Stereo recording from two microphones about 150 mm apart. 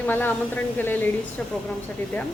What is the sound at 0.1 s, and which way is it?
Speech, 10° left (ahead or behind).